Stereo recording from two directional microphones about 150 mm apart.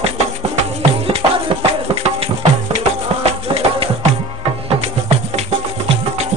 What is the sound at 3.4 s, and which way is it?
Music, 40° right (ahead or behind).